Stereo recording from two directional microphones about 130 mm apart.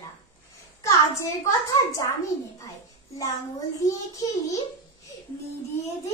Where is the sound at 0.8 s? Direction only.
25° left (ahead or behind).